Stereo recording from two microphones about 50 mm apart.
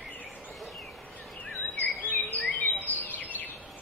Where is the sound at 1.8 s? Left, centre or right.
Left.